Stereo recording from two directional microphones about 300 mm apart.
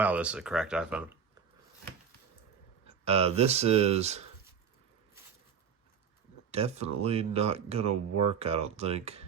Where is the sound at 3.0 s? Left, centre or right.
Centre.